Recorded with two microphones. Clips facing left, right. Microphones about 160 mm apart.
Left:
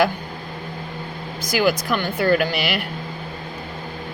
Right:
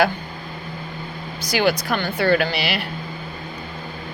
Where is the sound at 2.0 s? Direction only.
50° left (ahead or behind).